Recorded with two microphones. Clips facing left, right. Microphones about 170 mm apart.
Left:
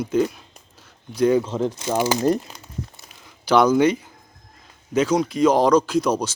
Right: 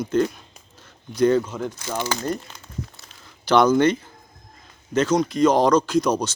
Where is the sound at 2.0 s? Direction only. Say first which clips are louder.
Left 6 dB; 15° left (ahead or behind).